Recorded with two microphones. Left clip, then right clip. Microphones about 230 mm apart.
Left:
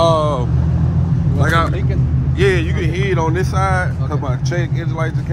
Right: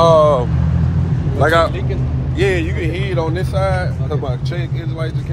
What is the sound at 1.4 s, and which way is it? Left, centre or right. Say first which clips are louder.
Speech: right 4 dB; centre.